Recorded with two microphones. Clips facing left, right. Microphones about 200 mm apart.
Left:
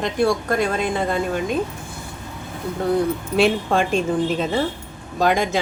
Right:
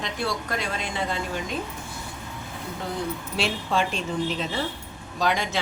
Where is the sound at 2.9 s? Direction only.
55° left (ahead or behind).